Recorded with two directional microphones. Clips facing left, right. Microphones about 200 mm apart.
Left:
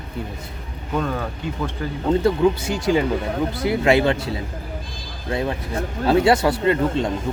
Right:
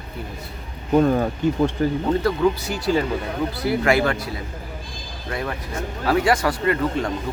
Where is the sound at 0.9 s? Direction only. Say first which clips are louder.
Right 7 dB; 35° right (ahead or behind).